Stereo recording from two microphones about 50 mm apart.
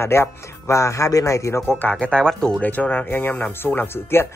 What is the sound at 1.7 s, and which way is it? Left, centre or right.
Speech, left.